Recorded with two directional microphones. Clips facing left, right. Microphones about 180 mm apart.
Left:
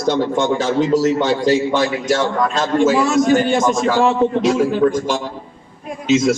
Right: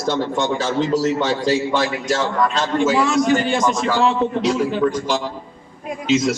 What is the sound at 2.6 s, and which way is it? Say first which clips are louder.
A man's voice: left 4 dB; 45° left (ahead or behind).